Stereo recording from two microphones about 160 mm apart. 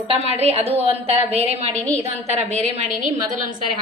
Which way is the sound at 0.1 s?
40° right (ahead or behind).